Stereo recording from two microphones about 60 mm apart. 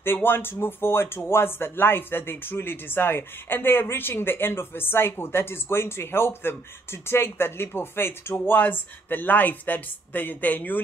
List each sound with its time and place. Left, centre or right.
0.0 s speech: left